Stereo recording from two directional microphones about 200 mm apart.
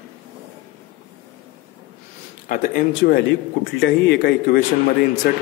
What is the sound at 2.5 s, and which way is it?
Speech, 45° left (ahead or behind).